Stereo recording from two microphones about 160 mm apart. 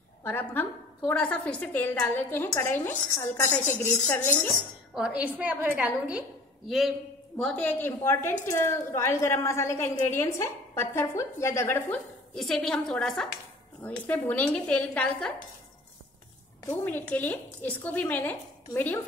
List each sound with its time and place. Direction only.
0.2 s a woman's voice: 10° left (ahead or behind)
4.9 s a woman's voice: 5° right (ahead or behind)
7.3 s a woman's voice: 5° left (ahead or behind)
12.4 s a woman's voice: 5° left (ahead or behind)
16.6 s a woman's voice: 10° left (ahead or behind)